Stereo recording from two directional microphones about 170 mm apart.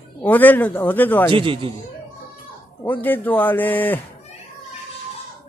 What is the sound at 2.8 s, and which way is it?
Speech, 10° left (ahead or behind).